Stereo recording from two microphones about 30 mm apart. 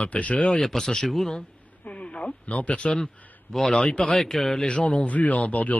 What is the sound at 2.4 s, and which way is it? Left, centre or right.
Speech, left.